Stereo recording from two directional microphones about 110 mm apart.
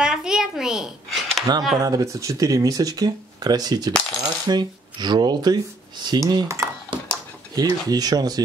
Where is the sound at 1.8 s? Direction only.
30° right (ahead or behind).